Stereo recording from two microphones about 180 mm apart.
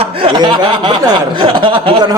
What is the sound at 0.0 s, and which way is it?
Speech, 30° right (ahead or behind).